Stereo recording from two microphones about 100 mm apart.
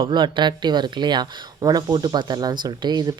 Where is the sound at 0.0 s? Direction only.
50° right (ahead or behind).